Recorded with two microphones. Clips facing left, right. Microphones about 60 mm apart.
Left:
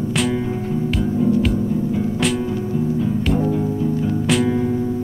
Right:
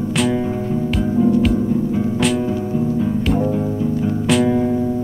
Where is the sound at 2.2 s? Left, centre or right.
Centre.